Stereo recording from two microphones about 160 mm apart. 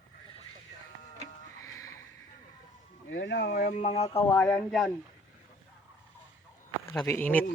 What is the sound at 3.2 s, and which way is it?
Speech, 90° left.